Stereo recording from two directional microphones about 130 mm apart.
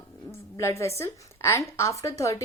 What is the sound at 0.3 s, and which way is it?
A woman's voice, 20° left (ahead or behind).